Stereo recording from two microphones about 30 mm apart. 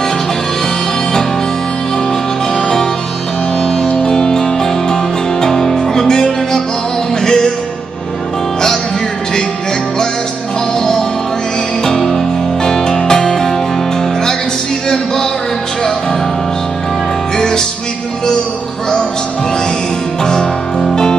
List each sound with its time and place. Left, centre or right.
2.5 s music: left
3.8 s music: left
4.1 s music: left
10.8 s music: centre
17.4 s music: left
20.2 s music: left